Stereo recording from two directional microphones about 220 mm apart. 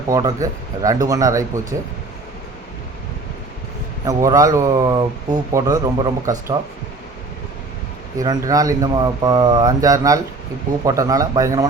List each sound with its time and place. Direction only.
0.1 s speech: 15° right (ahead or behind)
4.0 s speech: 15° right (ahead or behind)
8.2 s speech: 15° right (ahead or behind)